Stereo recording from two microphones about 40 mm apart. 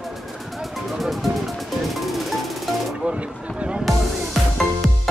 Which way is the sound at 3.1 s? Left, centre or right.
Right.